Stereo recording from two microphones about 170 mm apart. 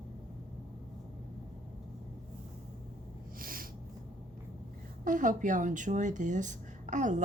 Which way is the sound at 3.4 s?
55° right (ahead or behind).